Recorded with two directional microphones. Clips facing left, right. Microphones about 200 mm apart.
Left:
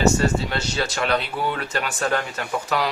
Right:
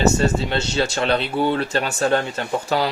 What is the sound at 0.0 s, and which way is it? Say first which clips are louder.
Speech: right 1 dB; 25° right (ahead or behind).